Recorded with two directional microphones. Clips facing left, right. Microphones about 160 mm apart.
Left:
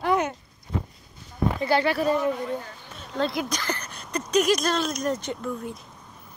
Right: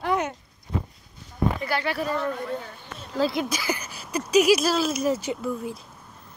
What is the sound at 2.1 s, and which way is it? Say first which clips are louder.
Speech: left 2 dB; 10° left (ahead or behind).